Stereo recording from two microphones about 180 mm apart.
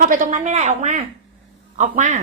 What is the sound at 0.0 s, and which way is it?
A woman's voice, 45° right (ahead or behind).